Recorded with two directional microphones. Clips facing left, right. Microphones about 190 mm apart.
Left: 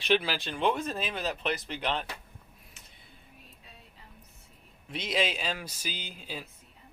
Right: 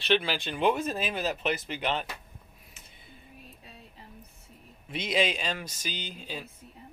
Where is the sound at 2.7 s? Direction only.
Centre (ahead or behind).